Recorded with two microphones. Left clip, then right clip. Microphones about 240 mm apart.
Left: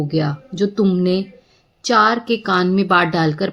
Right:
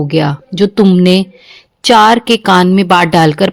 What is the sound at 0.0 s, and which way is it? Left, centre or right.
A woman's voice, right.